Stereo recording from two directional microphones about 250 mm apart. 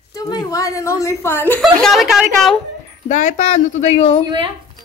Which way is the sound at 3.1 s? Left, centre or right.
Left.